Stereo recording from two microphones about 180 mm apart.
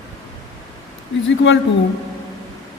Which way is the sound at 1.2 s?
90° left.